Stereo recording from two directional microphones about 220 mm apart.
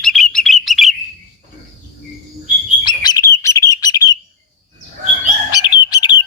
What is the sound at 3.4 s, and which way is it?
Chirp, 15° left (ahead or behind).